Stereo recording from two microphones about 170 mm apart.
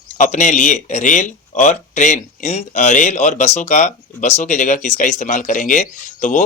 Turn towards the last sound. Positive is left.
turn(degrees=45)  # may be behind; listen again after turning